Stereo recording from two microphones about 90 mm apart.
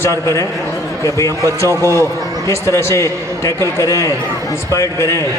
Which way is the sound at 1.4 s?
35° right (ahead or behind).